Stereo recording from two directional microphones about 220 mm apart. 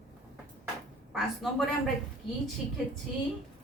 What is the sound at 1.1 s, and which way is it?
Speech, centre (ahead or behind).